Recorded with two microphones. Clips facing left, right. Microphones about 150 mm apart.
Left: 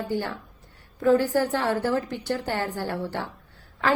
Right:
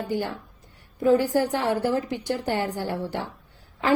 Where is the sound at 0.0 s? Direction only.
15° right (ahead or behind).